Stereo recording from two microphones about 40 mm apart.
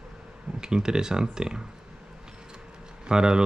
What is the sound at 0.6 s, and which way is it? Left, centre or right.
Speech, centre.